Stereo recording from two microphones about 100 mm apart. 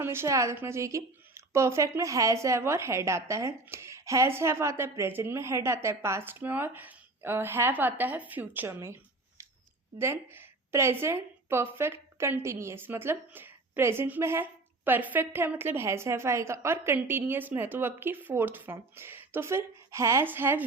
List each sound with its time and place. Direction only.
0.0 s a woman's voice: 25° right (ahead or behind)
10.0 s a woman's voice: 25° right (ahead or behind)